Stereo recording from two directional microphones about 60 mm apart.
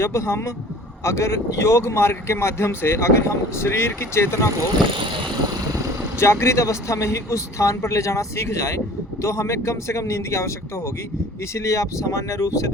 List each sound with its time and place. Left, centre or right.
0.0 s speech: left
6.1 s speech: left
11.5 s speech: left